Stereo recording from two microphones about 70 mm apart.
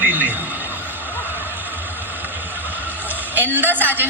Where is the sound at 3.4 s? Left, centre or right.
Right.